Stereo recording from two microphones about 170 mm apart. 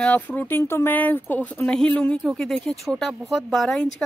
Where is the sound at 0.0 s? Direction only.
10° left (ahead or behind).